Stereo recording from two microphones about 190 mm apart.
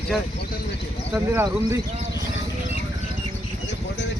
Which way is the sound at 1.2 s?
10° right (ahead or behind).